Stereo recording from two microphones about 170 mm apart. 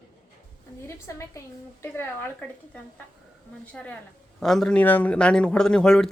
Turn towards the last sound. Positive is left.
turn(degrees=5)  # may be behind; listen again after turning